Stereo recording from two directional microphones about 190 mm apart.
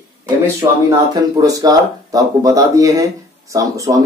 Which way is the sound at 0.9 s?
20° right (ahead or behind).